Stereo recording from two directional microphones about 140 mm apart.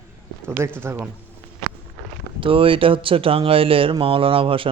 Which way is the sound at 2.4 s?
40° right (ahead or behind).